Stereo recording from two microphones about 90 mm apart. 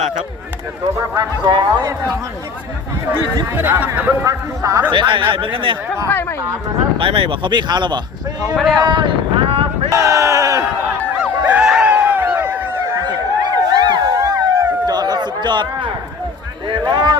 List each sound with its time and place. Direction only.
0.9 s speech: 35° right (ahead or behind)
1.5 s speech: 55° right (ahead or behind)
3.6 s speech: 20° right (ahead or behind)
4.2 s speech: 40° right (ahead or behind)
4.9 s speech: 65° right (ahead or behind)
6.1 s speech: 25° left (ahead or behind)
7.0 s speech: 85° right; by 8.0 s 55° right (ahead or behind)
8.5 s speech: centre (ahead or behind)
8.8 s a sound: 60° right (ahead or behind); by 9.9 s 85° right
9.9 s crowd: 35° right (ahead or behind)
11.2 s a sound: 15° right (ahead or behind)
13.1 s a sound: 50° right (ahead or behind)